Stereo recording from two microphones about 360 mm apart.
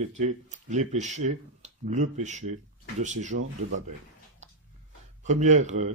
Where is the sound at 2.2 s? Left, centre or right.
Centre.